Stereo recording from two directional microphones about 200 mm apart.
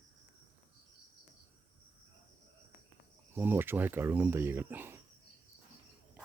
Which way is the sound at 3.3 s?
10° right (ahead or behind).